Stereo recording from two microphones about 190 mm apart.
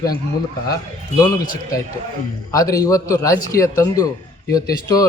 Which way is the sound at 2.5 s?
20° left (ahead or behind).